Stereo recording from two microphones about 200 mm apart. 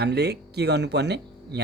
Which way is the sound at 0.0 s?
55° right (ahead or behind).